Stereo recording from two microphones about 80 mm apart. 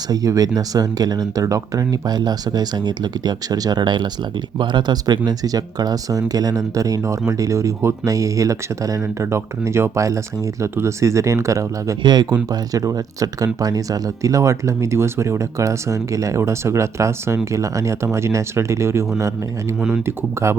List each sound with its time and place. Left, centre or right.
0.1 s speech: right
9.2 s speech: right
12.0 s speech: right
12.5 s speech: right